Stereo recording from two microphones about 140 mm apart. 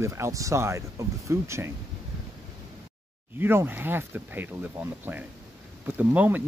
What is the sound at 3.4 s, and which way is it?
Speech, 15° right (ahead or behind).